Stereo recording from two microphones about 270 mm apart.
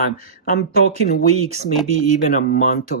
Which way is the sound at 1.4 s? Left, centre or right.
Right.